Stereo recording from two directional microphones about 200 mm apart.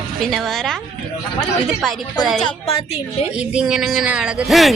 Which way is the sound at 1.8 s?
Centre (ahead or behind).